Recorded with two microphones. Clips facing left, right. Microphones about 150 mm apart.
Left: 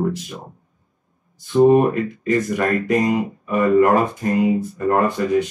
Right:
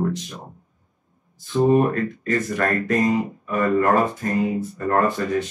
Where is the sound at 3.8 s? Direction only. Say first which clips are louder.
Left 3 dB; 20° left (ahead or behind).